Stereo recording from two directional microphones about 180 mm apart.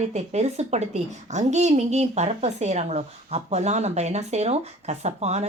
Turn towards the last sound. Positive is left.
turn(degrees=-35)  # may be behind; listen again after turning